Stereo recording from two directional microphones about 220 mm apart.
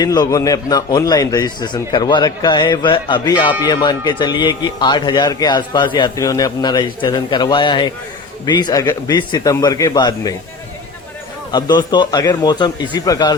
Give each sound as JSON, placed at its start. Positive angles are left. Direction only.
{"t": 0.0, "sound": "a man's voice", "side_deg": 15}
{"t": 11.5, "sound": "a man's voice", "side_deg": 20}